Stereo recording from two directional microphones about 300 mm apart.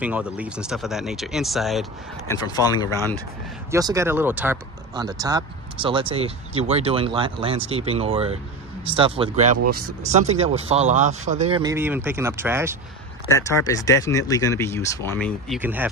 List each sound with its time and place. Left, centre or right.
0.0 s speech: centre
2.4 s speech: centre
3.7 s speech: centre
13.3 s speech: centre